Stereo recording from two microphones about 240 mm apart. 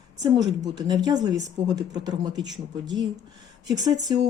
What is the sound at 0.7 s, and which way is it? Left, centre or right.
Speech, centre.